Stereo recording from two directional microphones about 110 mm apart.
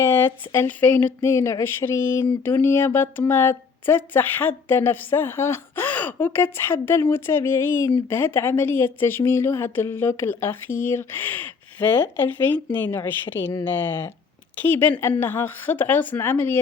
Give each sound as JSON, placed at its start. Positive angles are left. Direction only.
{"t": 0.0, "sound": "speech", "side_deg": 20}
{"t": 13.3, "sound": "speech", "side_deg": 30}
{"t": 13.7, "sound": "a woman's voice", "side_deg": 20}